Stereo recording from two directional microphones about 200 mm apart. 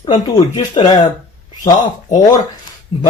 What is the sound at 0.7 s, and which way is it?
Speech, 25° left (ahead or behind).